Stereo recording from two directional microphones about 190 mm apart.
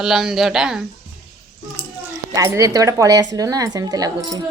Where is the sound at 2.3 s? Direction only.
15° right (ahead or behind).